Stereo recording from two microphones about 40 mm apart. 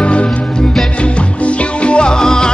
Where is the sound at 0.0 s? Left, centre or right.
Left.